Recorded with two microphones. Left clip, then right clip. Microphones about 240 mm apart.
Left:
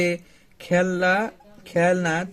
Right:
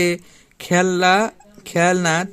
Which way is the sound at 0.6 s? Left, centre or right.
Right.